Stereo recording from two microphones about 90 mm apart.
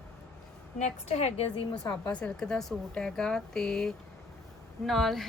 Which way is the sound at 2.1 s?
10° left (ahead or behind).